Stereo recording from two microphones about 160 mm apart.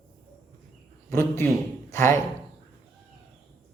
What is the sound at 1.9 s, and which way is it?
Speech, 15° left (ahead or behind).